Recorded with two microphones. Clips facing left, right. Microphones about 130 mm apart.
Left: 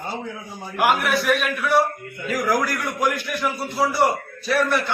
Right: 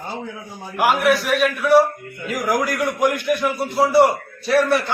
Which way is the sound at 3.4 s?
25° right (ahead or behind).